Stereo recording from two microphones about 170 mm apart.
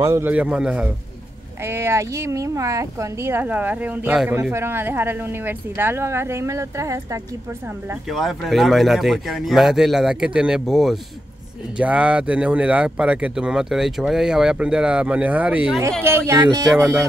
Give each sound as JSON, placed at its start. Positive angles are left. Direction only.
{"t": 0.0, "sound": "speech", "side_deg": -15}
{"t": 8.1, "sound": "speech", "side_deg": 0}